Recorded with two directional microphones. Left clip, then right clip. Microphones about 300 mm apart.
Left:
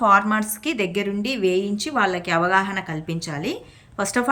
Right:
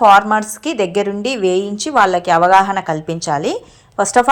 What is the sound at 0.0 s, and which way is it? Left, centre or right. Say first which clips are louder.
A woman's voice: right 8 dB; centre.